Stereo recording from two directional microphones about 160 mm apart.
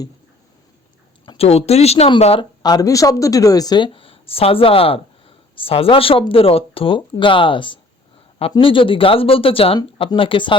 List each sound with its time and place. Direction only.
1.2 s speech: 35° left (ahead or behind)